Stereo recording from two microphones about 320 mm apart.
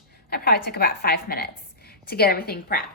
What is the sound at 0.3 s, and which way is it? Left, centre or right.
A woman's voice, left.